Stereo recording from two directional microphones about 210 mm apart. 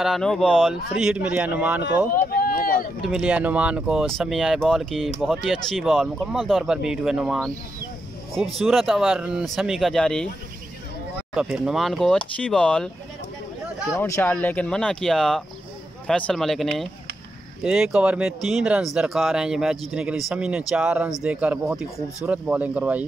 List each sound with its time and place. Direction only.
0.0 s speech: centre (ahead or behind)
2.1 s speech: 45° left (ahead or behind)
3.0 s speech: 5° right (ahead or behind)
11.3 s speech: 5° right (ahead or behind)
13.9 s speech: 15° left (ahead or behind); by 23.0 s 5° right (ahead or behind)